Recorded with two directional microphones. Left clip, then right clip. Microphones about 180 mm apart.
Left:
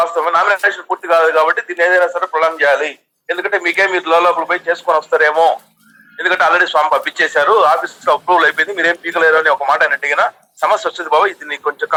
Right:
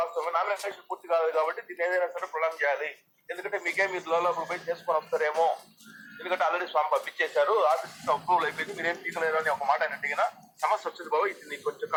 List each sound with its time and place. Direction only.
0.0 s a man's voice: 65° left (ahead or behind)